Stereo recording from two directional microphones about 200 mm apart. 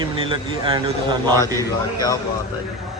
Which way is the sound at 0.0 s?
25° right (ahead or behind).